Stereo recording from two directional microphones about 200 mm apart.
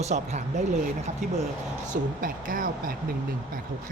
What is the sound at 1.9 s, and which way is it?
Speech, 45° right (ahead or behind).